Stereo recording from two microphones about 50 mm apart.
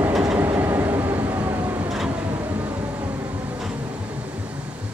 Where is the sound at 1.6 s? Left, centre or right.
Right.